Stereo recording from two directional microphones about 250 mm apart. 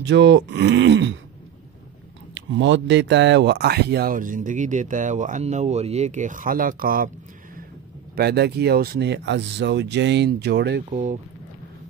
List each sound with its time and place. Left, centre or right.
0.0 s speech: right
2.3 s speech: right
8.2 s speech: right
10.9 s speech: right